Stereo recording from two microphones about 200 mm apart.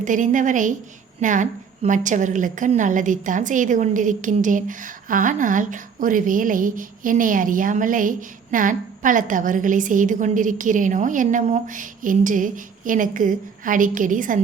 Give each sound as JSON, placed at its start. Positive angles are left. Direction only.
{"t": 0.0, "sound": "a woman's voice", "side_deg": -40}